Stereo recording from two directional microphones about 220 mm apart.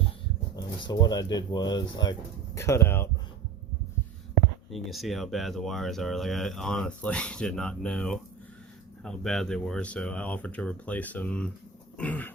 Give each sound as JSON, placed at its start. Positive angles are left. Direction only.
{"t": 0.5, "sound": "speech", "side_deg": 20}
{"t": 4.7, "sound": "speech", "side_deg": 0}
{"t": 11.9, "sound": "throat clearing", "side_deg": 5}